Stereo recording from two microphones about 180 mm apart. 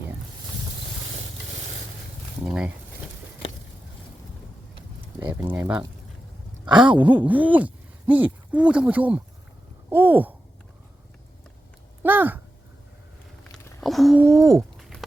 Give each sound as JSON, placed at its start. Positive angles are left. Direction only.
{"t": 2.4, "sound": "speech", "side_deg": -5}
{"t": 5.5, "sound": "speech", "side_deg": -10}
{"t": 6.8, "sound": "a sound", "side_deg": -25}
{"t": 7.1, "sound": "speech", "side_deg": -10}
{"t": 12.0, "sound": "speech", "side_deg": -10}
{"t": 13.8, "sound": "speech", "side_deg": 0}
{"t": 14.3, "sound": "speech", "side_deg": -15}
{"t": 14.8, "sound": "a sound", "side_deg": 0}